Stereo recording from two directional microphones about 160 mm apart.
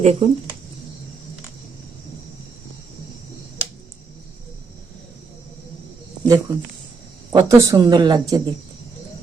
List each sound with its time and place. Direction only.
0.0 s speech: 40° right (ahead or behind)
6.2 s a woman's voice: 20° right (ahead or behind)